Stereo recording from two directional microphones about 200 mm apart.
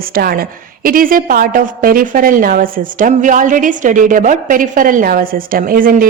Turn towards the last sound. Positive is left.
turn(degrees=-45)  # may be behind; listen again after turning